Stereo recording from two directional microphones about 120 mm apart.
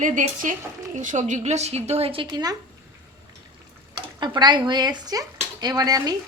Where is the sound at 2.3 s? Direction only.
35° right (ahead or behind).